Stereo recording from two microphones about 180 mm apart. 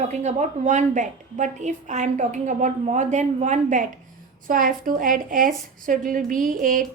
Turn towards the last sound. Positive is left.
turn(degrees=-50)  # may be behind; listen again after turning